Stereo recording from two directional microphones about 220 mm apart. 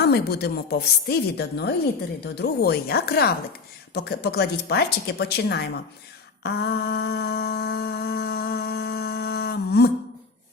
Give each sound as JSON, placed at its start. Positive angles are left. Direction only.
{"t": 0.0, "sound": "a woman's voice", "side_deg": 45}
{"t": 6.4, "sound": "humming", "side_deg": 45}